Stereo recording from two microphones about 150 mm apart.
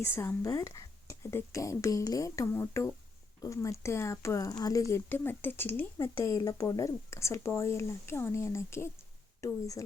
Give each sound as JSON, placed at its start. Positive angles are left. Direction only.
{"t": 0.0, "sound": "speech", "side_deg": 15}